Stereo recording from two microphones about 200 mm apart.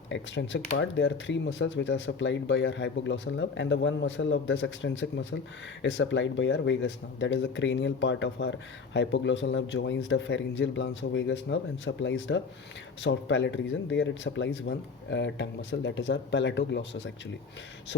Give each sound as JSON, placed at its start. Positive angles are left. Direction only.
{"t": 0.1, "sound": "speech", "side_deg": 65}